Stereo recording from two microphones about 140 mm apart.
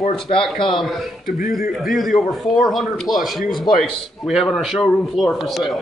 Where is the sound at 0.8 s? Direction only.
Centre (ahead or behind).